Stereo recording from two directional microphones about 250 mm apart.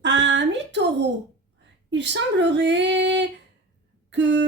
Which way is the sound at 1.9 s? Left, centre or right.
Right.